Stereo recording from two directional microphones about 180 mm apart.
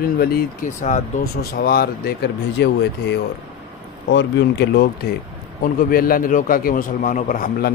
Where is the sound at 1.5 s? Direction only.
55° left (ahead or behind).